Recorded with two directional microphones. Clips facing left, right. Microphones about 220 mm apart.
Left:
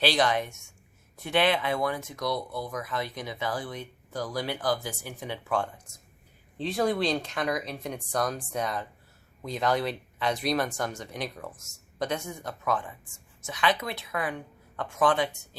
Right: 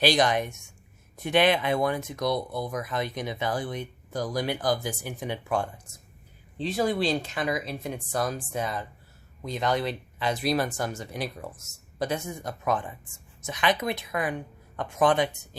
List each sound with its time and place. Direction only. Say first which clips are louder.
0.0 s a woman's voice: right 2 dB; 15° right (ahead or behind)
6.6 s a woman's voice: right 1 dB; centre (ahead or behind); by 15.4 s 20° right (ahead or behind)